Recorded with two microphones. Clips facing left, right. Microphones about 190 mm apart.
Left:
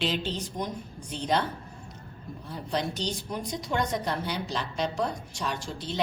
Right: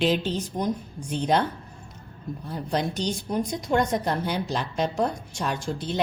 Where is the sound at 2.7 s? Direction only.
50° right (ahead or behind).